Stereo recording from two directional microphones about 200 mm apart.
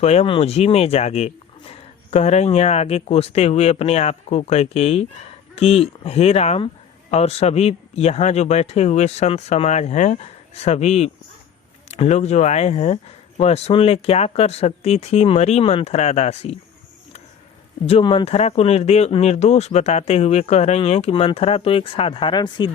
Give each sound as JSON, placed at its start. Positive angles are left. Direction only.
{"t": 0.0, "sound": "speech", "side_deg": 30}
{"t": 17.8, "sound": "speech", "side_deg": 30}